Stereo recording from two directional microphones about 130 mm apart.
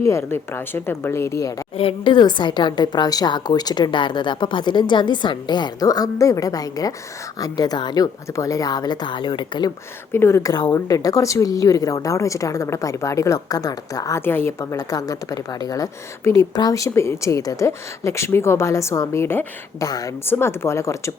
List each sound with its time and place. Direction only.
0.0 s speech: 20° left (ahead or behind)
1.7 s a woman's voice: 45° left (ahead or behind)
10.1 s speech: 20° left (ahead or behind)